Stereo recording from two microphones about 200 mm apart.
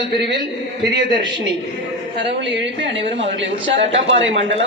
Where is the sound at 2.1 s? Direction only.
60° right (ahead or behind).